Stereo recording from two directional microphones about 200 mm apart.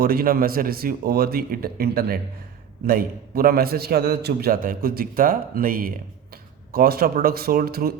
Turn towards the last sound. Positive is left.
turn(degrees=-50)  # may be behind; listen again after turning